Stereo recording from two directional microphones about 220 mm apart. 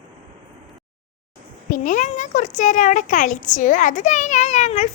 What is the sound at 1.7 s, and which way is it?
Speech, 35° left (ahead or behind).